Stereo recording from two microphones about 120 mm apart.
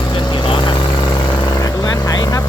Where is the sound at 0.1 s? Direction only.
40° left (ahead or behind).